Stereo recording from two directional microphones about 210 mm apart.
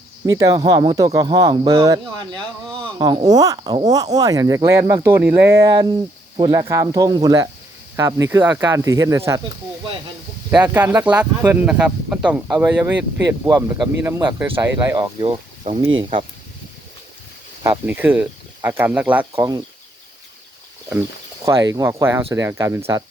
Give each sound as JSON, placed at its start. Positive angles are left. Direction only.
{"t": 0.3, "sound": "speech", "side_deg": -15}
{"t": 10.8, "sound": "speech", "side_deg": -5}
{"t": 17.6, "sound": "speech", "side_deg": -10}
{"t": 21.4, "sound": "speech", "side_deg": -15}